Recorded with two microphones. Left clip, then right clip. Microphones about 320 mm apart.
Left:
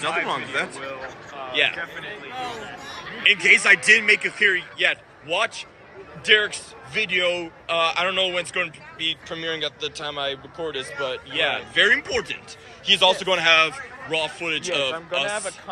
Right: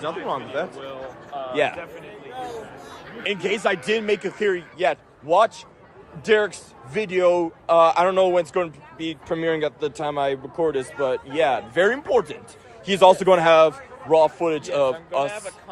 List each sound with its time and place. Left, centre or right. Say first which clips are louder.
0.0 s speech: left 3 dB; centre
1.3 s a sound: right 5 dB; right
3.4 s a man's voice: left 7 dB; centre
12.9 s a man's voice: right 4 dB; right